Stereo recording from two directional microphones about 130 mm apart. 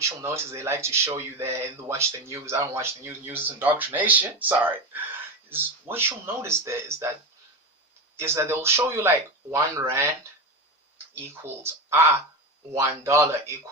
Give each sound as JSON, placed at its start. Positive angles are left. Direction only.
{"t": 0.0, "sound": "speech", "side_deg": -20}
{"t": 8.2, "sound": "speech", "side_deg": -20}